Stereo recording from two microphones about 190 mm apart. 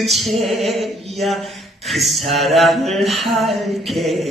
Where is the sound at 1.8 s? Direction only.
Centre (ahead or behind).